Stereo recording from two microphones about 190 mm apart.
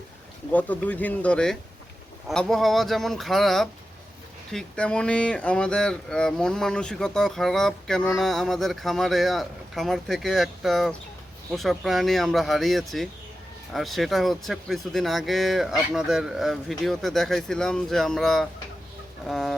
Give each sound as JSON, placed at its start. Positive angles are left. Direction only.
{"t": 0.5, "sound": "speech", "side_deg": 10}